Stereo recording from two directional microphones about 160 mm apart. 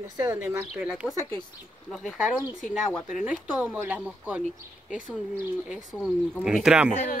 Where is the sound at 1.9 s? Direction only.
5° right (ahead or behind).